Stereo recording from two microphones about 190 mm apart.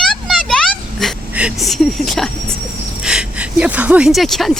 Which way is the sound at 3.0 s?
5° right (ahead or behind).